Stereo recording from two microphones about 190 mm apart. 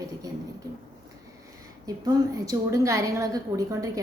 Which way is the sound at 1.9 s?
20° right (ahead or behind).